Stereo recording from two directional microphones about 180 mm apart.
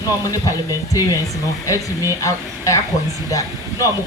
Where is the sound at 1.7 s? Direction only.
15° right (ahead or behind).